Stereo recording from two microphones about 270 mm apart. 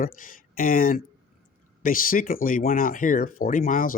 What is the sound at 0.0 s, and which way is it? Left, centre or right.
Speech, left.